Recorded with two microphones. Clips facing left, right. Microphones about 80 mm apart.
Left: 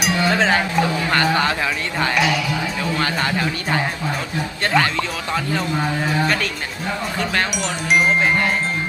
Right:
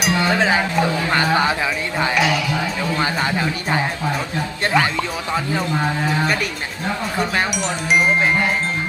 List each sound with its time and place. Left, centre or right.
0.0 s speech: centre
2.1 s chime: centre
3.0 s speech: centre
7.5 s chime: centre